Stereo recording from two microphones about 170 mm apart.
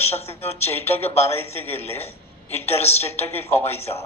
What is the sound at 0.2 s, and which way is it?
Speech, 35° left (ahead or behind).